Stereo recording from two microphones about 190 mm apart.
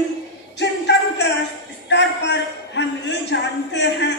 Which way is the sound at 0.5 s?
65° left (ahead or behind).